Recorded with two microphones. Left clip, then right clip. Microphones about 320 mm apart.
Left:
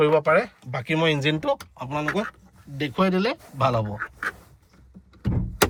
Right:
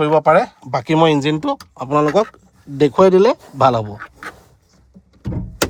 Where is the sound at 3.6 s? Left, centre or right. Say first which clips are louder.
Right 8 dB; centre.